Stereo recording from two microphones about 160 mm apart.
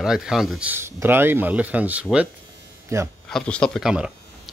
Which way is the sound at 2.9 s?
20° right (ahead or behind).